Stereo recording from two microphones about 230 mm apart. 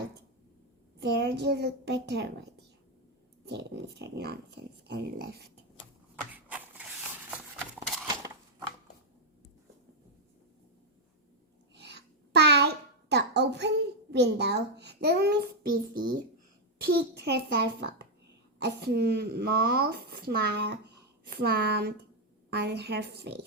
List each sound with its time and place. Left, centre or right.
0.9 s a child's voice: right
3.4 s speech: right
6.1 s a sound: centre
8.0 s scissors: centre
11.7 s a sound: right
16.8 s speech: right